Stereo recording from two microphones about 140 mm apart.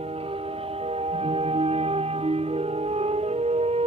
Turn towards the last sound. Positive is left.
turn(degrees=-45)  # may be behind; listen again after turning